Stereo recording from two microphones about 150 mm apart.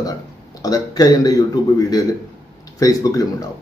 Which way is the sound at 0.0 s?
25° left (ahead or behind).